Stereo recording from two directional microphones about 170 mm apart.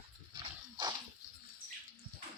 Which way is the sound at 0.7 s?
25° right (ahead or behind).